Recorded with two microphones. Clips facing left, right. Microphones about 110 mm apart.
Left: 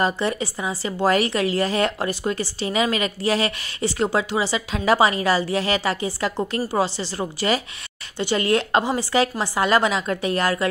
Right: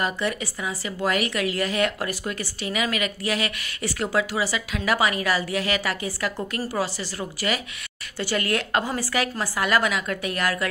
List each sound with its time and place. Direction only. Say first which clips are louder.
0.0 s speech: left 4 dB; 30° left (ahead or behind)